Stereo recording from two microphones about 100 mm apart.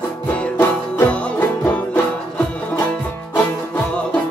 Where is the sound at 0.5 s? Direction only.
20° left (ahead or behind).